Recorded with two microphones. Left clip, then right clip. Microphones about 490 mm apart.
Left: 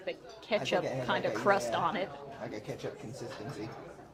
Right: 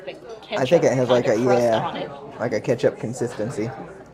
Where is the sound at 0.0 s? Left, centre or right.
Left.